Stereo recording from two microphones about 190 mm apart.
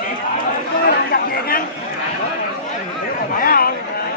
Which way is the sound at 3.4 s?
50° left (ahead or behind).